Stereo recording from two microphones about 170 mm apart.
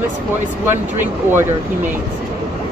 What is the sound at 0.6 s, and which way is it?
Speech, 10° right (ahead or behind).